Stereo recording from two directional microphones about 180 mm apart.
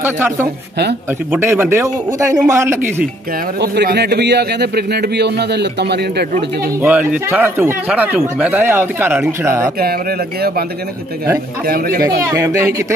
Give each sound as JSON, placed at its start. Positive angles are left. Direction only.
{"t": 0.0, "sound": "speech", "side_deg": -10}
{"t": 3.6, "sound": "a man's voice", "side_deg": -65}
{"t": 6.8, "sound": "speech", "side_deg": -5}
{"t": 11.6, "sound": "a man's voice", "side_deg": -55}
{"t": 12.3, "sound": "speech", "side_deg": -15}